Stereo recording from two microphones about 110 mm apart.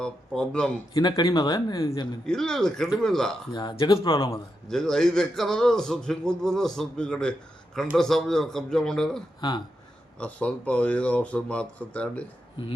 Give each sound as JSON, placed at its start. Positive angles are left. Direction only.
{"t": 0.0, "sound": "speech", "side_deg": 5}
{"t": 0.9, "sound": "speech", "side_deg": 35}
{"t": 2.2, "sound": "a man's voice", "side_deg": 5}
{"t": 3.5, "sound": "speech", "side_deg": 40}
{"t": 4.7, "sound": "a man's voice", "side_deg": 5}
{"t": 9.4, "sound": "speech", "side_deg": 40}
{"t": 10.2, "sound": "speech", "side_deg": 10}